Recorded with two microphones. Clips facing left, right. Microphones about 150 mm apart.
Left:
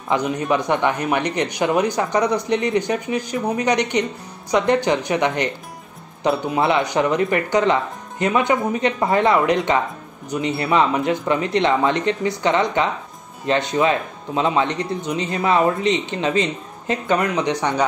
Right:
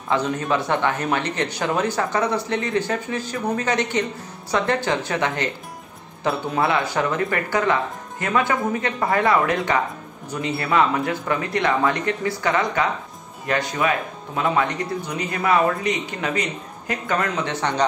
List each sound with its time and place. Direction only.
0.1 s speech: 15° left (ahead or behind)